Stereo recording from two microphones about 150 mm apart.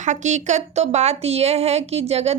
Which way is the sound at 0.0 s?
55° right (ahead or behind).